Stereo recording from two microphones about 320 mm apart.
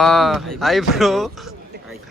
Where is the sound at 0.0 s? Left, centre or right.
Centre.